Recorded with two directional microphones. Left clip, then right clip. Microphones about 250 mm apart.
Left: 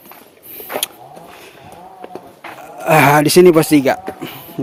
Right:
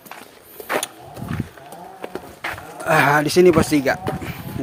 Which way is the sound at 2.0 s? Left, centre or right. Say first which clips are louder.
Right 4 dB; right.